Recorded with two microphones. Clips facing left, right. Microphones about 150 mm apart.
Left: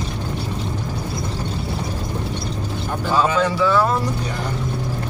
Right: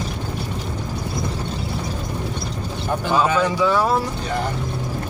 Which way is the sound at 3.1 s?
15° right (ahead or behind).